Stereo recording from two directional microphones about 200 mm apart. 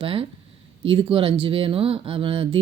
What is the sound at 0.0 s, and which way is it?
Speech, 25° right (ahead or behind).